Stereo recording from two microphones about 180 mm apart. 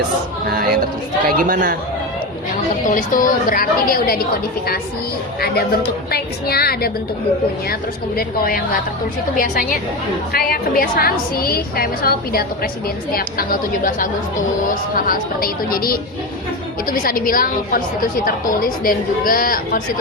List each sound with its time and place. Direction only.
0.5 s speech: 55° right (ahead or behind)
2.8 s a woman's voice: 45° left (ahead or behind)
5.4 s a woman's voice: 60° left (ahead or behind)